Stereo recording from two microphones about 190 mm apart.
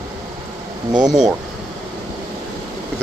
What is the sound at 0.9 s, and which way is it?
Speech, 20° right (ahead or behind).